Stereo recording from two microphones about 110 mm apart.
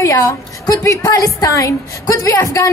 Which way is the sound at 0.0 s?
30° left (ahead or behind).